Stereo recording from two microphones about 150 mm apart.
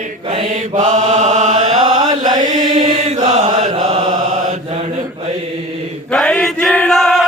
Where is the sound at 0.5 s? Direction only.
60° right (ahead or behind).